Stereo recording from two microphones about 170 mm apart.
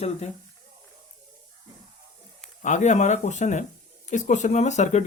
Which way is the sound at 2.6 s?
45° left (ahead or behind).